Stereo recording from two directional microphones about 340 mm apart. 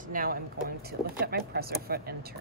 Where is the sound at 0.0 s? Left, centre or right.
Right.